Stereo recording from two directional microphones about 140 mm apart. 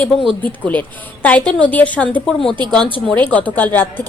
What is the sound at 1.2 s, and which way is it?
A woman's voice, 10° left (ahead or behind).